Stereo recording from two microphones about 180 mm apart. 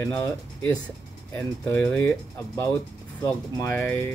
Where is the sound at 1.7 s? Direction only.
10° left (ahead or behind).